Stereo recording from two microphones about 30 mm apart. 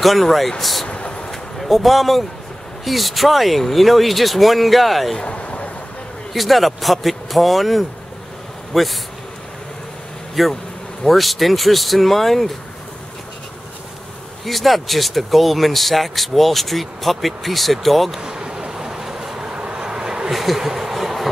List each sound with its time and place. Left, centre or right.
0.0 s speech: centre
0.8 s vehicle: left
1.3 s a sound: centre
2.8 s speech: centre
5.2 s a sound: left
6.3 s speech: centre
10.4 s speech: centre
14.4 s speech: centre
18.2 s vehicle: right
20.2 s a sound: centre